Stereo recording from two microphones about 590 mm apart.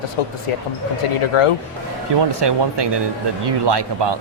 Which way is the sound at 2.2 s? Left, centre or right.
Right.